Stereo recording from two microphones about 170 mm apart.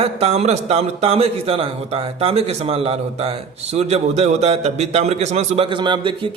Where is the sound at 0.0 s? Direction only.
40° right (ahead or behind).